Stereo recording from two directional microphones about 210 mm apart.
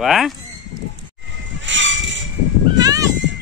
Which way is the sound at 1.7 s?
60° right (ahead or behind).